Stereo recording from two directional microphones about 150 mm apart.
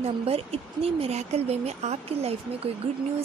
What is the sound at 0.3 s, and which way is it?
Speech, 40° right (ahead or behind).